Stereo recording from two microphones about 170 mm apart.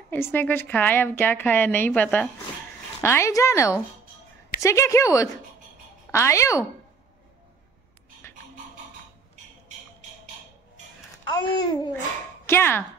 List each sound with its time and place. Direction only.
0.1 s a woman's voice: 10° left (ahead or behind)
11.2 s speech: 25° left (ahead or behind)
12.4 s speech: 15° left (ahead or behind)